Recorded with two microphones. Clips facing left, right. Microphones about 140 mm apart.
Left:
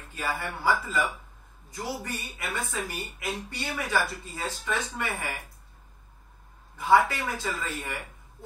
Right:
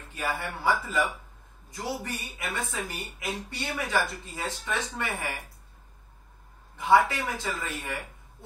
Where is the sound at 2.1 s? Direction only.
20° right (ahead or behind).